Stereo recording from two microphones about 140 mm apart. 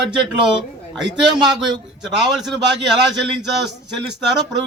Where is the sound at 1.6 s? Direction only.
30° right (ahead or behind).